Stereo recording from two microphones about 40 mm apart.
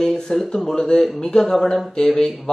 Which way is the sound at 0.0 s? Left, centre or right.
Centre.